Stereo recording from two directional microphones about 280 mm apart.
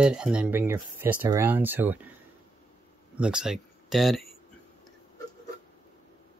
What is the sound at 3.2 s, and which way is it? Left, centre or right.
Speech, centre.